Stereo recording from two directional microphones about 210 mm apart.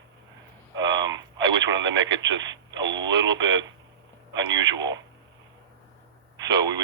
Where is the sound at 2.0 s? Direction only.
60° right (ahead or behind).